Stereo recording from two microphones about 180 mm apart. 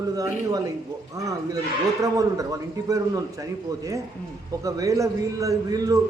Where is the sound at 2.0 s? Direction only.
20° right (ahead or behind).